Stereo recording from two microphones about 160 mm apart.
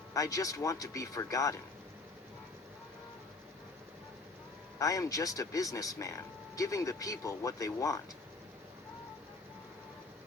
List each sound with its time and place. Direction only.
0.1 s speech: 20° left (ahead or behind)
4.8 s speech: 20° left (ahead or behind)